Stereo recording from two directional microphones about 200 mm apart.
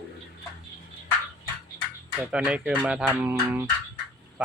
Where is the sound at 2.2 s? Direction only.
5° right (ahead or behind).